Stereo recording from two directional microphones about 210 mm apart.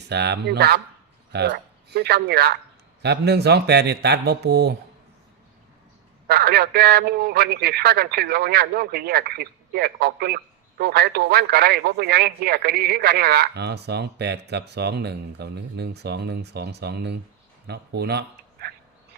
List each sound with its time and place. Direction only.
0.1 s a man's voice: 55° right (ahead or behind)
6.2 s a man's voice: 45° right (ahead or behind)